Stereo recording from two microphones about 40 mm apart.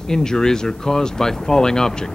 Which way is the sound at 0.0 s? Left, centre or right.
Centre.